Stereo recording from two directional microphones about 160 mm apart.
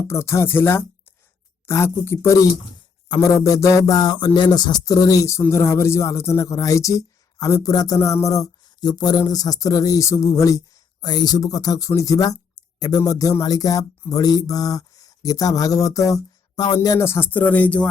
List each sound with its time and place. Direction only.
0.1 s speech: 15° left (ahead or behind)